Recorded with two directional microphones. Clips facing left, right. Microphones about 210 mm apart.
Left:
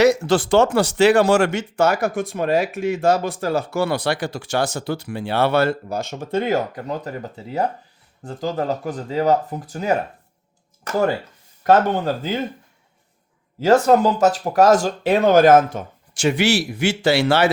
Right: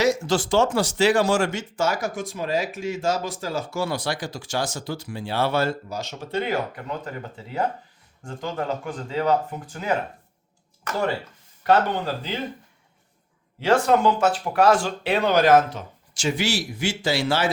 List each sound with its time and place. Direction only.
0.0 s speech: 65° left (ahead or behind); by 12.4 s 45° left (ahead or behind)
13.6 s speech: 40° left (ahead or behind); by 17.5 s 65° left (ahead or behind)